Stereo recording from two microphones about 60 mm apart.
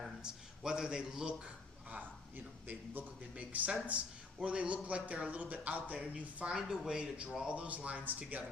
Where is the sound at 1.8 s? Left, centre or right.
Right.